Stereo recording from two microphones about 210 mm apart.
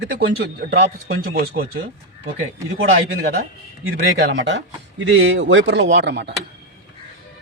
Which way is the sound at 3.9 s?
60° right (ahead or behind).